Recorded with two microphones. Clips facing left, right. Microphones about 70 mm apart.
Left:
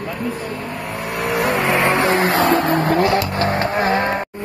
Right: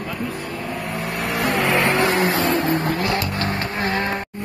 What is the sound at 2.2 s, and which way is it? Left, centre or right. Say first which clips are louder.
Vehicle: left 4 dB; left.